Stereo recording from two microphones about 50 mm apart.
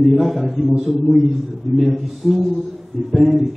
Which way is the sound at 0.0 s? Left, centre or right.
Centre.